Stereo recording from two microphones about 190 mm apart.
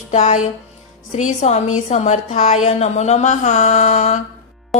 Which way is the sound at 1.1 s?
40° left (ahead or behind).